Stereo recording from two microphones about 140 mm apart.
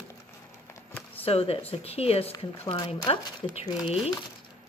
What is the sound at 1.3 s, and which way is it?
Speech, 45° left (ahead or behind).